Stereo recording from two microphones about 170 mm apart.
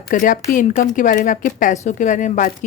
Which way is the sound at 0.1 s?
50° left (ahead or behind).